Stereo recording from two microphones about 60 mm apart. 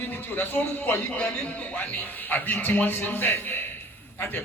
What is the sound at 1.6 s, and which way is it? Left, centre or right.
A man's voice, left.